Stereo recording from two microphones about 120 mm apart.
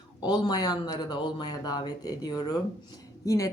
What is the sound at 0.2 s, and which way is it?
Speech, 35° left (ahead or behind).